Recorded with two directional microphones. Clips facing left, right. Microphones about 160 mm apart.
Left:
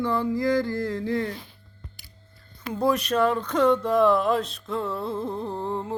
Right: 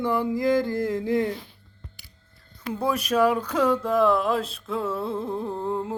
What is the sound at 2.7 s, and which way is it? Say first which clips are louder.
Speech: left 1 dB; 5° right (ahead or behind).